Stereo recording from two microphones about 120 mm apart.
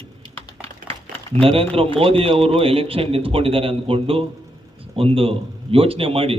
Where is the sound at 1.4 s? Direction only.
50° right (ahead or behind).